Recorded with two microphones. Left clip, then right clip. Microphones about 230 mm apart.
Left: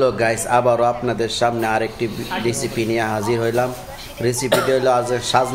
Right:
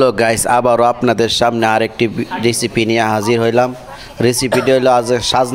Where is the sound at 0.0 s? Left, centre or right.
Right.